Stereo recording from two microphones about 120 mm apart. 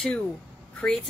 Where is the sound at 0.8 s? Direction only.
15° left (ahead or behind).